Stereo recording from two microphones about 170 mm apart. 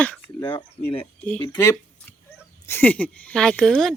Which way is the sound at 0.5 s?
35° left (ahead or behind).